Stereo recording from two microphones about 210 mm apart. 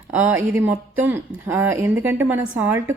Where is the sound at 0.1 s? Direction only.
5° right (ahead or behind).